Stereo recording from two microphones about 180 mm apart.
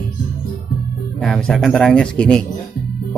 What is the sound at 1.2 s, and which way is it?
Speech, centre (ahead or behind).